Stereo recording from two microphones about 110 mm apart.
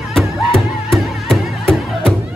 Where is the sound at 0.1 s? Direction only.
Centre (ahead or behind).